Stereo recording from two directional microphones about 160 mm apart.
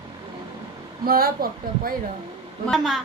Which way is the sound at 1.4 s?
65° right (ahead or behind).